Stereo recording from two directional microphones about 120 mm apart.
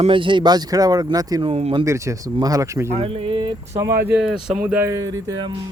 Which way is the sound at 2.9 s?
55° right (ahead or behind).